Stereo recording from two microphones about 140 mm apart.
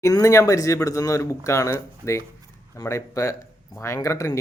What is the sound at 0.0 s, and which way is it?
Speech, 25° left (ahead or behind).